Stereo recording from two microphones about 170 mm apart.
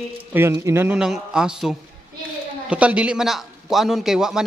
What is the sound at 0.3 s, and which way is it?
A man's voice, 15° right (ahead or behind).